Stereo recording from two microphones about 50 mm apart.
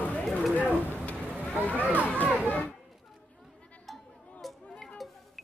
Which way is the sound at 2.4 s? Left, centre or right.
Left.